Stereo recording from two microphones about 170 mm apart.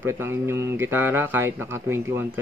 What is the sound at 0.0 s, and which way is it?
Speech, 15° right (ahead or behind).